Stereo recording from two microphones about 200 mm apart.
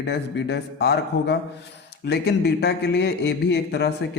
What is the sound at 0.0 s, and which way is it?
A man's voice, 60° left (ahead or behind).